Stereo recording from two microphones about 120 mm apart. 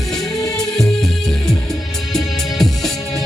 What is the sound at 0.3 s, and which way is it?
Music, 5° left (ahead or behind).